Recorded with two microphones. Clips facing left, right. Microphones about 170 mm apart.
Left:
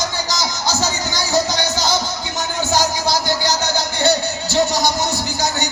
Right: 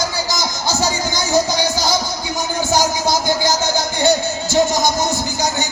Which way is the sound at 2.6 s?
15° right (ahead or behind).